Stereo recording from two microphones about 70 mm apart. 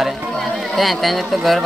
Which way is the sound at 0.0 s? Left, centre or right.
Centre.